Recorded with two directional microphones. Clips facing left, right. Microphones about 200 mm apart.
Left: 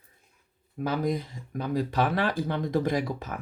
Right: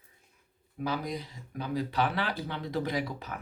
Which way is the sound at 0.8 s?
50° left (ahead or behind).